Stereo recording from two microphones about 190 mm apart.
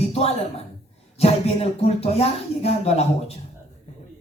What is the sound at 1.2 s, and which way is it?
Speech, 30° left (ahead or behind).